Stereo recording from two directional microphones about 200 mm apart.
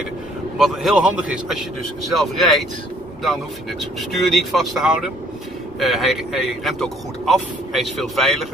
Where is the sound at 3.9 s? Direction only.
Centre (ahead or behind).